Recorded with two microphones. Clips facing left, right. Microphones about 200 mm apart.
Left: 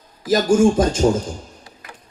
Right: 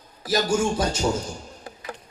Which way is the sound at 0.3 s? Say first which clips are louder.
Left 8 dB; 50° left (ahead or behind).